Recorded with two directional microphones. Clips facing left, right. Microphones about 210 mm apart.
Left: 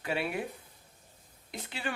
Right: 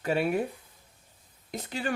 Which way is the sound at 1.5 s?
40° right (ahead or behind).